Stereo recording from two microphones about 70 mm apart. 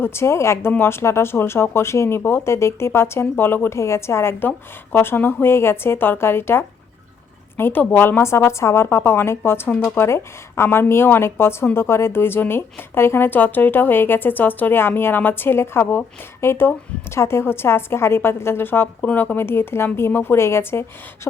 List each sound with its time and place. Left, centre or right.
0.0 s a woman's voice: left